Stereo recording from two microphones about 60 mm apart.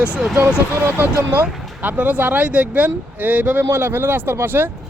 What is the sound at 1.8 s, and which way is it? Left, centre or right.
Speech, right.